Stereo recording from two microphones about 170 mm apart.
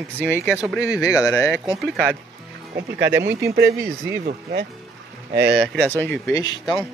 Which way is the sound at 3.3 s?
15° right (ahead or behind).